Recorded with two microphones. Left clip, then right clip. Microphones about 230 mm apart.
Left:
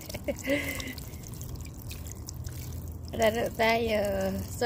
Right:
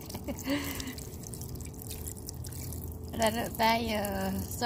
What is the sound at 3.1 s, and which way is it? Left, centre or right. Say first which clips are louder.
A woman's voice: left 4 dB; left.